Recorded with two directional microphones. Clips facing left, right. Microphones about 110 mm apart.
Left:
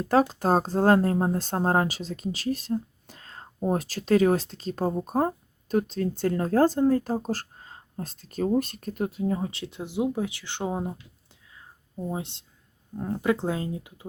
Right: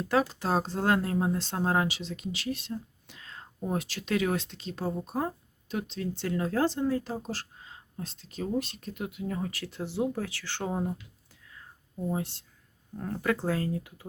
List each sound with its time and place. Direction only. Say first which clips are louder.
0.0 s speech: left 5 dB; 35° left (ahead or behind); by 10.9 s 15° left (ahead or behind)
11.5 s a sound: left 3 dB; 15° left (ahead or behind)
13.0 s speech: left 4 dB; 20° left (ahead or behind)